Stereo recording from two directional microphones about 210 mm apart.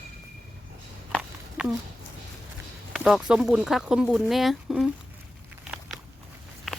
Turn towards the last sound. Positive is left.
turn(degrees=0)  # may be behind; listen again after turning